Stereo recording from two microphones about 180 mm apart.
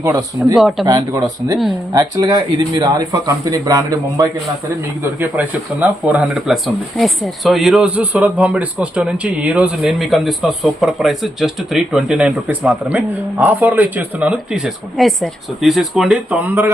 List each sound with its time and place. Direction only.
0.0 s a man's voice: 20° right (ahead or behind)
0.5 s speech: centre (ahead or behind)
0.9 s a man's voice: 20° right (ahead or behind)
5.2 s speech: 10° right (ahead or behind)